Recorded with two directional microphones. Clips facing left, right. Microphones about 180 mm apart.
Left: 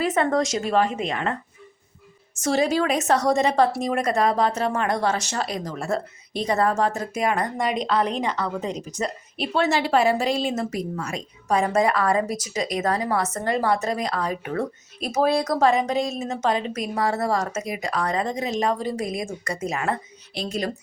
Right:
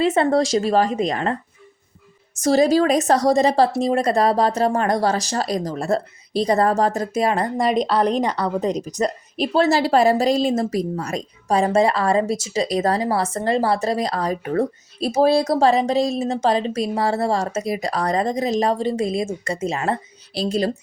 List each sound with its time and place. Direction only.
0.0 s speech: 30° right (ahead or behind)
2.4 s speech: 35° right (ahead or behind)